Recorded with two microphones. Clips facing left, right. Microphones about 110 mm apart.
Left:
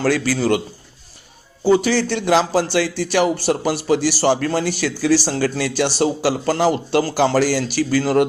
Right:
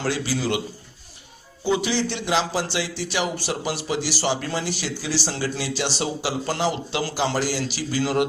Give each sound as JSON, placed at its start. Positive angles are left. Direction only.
{"t": 0.1, "sound": "a man's voice", "side_deg": 50}
{"t": 1.6, "sound": "a man's voice", "side_deg": 45}